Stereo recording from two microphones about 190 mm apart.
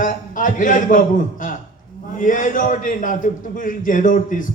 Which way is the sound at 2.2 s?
45° left (ahead or behind).